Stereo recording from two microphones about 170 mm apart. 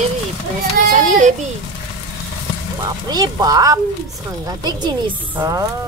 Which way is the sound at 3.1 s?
20° right (ahead or behind).